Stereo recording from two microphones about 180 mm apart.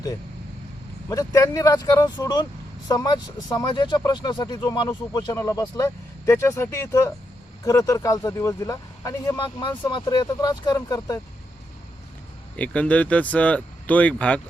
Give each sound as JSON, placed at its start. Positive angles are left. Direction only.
{"t": 1.1, "sound": "speech", "side_deg": 20}
{"t": 12.5, "sound": "speech", "side_deg": 5}